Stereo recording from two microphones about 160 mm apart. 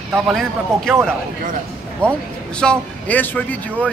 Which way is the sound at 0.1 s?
Centre (ahead or behind).